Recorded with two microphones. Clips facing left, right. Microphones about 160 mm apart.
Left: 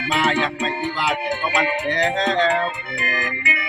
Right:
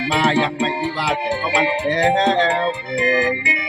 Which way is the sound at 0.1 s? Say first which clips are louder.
Right 2 dB; 35° right (ahead or behind).